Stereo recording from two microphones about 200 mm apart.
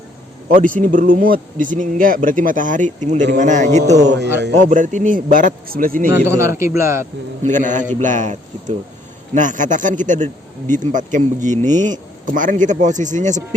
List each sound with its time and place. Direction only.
0.5 s a man's voice: 45° right (ahead or behind)
6.2 s speech: 15° right (ahead or behind)
7.4 s a man's voice: 40° right (ahead or behind)